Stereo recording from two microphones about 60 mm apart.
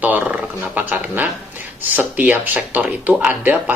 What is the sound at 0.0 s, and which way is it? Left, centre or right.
Speech, right.